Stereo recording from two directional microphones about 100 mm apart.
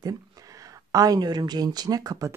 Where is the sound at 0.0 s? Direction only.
35° right (ahead or behind).